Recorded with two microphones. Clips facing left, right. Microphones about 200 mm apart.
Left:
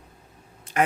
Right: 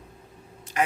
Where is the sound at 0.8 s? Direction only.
55° left (ahead or behind).